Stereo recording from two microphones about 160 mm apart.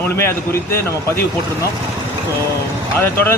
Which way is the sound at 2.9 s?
15° left (ahead or behind).